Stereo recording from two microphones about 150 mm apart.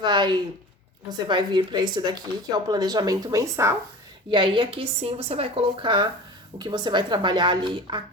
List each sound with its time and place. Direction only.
0.0 s a sound: 30° right (ahead or behind)
1.3 s speech: 30° right (ahead or behind)
4.3 s a woman's voice: 35° right (ahead or behind)